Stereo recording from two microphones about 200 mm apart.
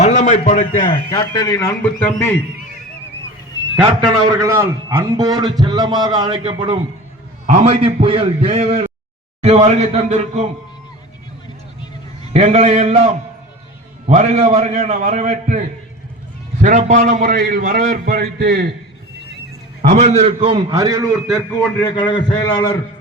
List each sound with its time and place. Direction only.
0.0 s a man's voice: 35° left (ahead or behind)
1.1 s a man's voice: 20° left (ahead or behind)
3.8 s a man's voice: 25° right (ahead or behind)
12.3 s a man's voice: 35° right (ahead or behind); by 18.7 s 50° right (ahead or behind)
19.9 s a man's voice: 35° right (ahead or behind); by 21.1 s 20° right (ahead or behind)
21.8 s a man's voice: 20° left (ahead or behind)